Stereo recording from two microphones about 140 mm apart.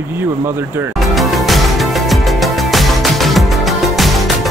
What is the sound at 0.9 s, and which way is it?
Music, centre (ahead or behind).